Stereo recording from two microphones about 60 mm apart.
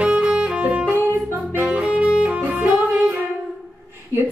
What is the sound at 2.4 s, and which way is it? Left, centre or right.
Music, right.